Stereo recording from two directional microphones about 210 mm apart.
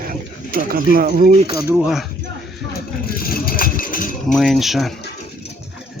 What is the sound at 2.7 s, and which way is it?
Vehicle, 45° left (ahead or behind).